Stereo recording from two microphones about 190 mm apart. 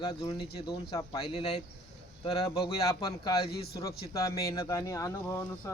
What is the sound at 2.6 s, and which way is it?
Speech, 25° left (ahead or behind).